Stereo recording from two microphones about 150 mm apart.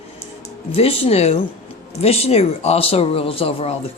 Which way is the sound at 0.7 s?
40° left (ahead or behind).